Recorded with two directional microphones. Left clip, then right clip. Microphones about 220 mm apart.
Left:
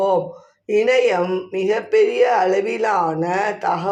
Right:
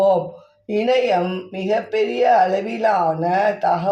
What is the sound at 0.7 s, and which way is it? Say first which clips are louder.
Speech: left 2 dB; 20° left (ahead or behind).